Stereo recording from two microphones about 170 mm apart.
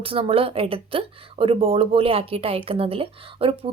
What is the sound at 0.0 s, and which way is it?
A woman's voice, 35° right (ahead or behind).